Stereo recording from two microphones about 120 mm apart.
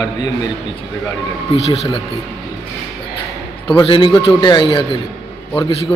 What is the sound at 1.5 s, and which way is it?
Speech, 55° left (ahead or behind).